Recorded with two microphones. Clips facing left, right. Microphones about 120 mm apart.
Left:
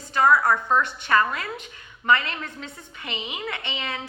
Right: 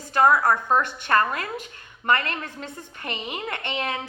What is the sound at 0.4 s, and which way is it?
A woman's voice, 45° right (ahead or behind).